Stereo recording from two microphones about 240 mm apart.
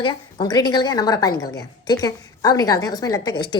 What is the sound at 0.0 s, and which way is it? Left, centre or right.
A woman's voice, centre.